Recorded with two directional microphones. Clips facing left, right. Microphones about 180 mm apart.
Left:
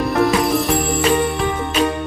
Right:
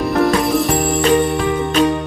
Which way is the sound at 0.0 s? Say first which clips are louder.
Right 1 dB; centre (ahead or behind).